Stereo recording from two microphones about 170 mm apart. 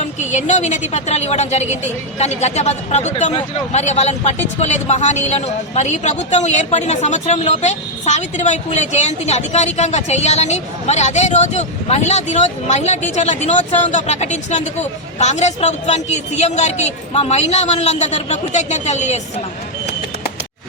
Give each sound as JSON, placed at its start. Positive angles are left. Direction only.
{"t": 0.0, "sound": "speech", "side_deg": 45}